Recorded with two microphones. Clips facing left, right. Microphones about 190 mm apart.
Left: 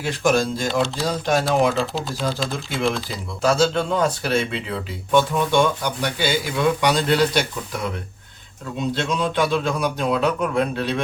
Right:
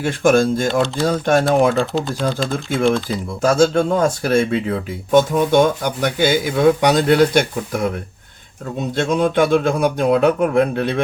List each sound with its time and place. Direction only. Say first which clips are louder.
0.0 s speech: right 5 dB; 50° right (ahead or behind)
0.7 s speech: right 4 dB; centre (ahead or behind)
1.0 s speech: right 5 dB; 55° right (ahead or behind)
1.7 s speech: right 5 dB; centre (ahead or behind)
3.4 s speech: right 4 dB; 45° right (ahead or behind)
9.0 s speech: right 7 dB; 50° right (ahead or behind)